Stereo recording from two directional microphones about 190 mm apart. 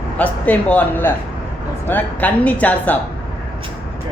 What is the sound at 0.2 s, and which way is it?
A man's voice, 10° left (ahead or behind).